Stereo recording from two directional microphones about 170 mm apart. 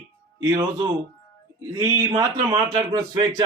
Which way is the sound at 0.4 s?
25° right (ahead or behind).